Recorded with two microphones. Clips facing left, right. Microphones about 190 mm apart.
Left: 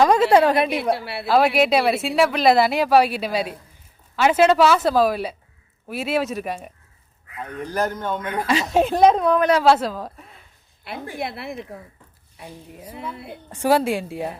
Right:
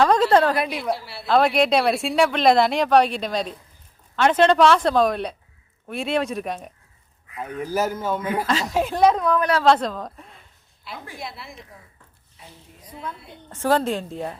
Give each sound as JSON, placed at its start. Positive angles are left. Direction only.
{"t": 0.0, "sound": "a woman's voice", "side_deg": 10}
{"t": 0.7, "sound": "a woman's voice", "side_deg": 60}
{"t": 1.3, "sound": "speech", "side_deg": 5}
{"t": 7.3, "sound": "speech", "side_deg": -5}
{"t": 8.7, "sound": "speech", "side_deg": 25}
{"t": 9.6, "sound": "speech", "side_deg": 5}
{"t": 10.9, "sound": "a woman's voice", "side_deg": 60}
{"t": 12.8, "sound": "a woman's voice", "side_deg": 10}